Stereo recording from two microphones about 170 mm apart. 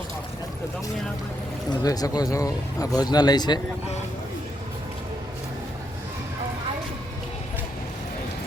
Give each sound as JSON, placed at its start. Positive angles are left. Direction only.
{"t": 1.8, "sound": "speech", "side_deg": 20}